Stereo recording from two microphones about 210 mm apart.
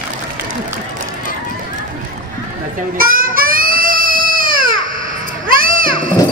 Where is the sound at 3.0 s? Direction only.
45° right (ahead or behind).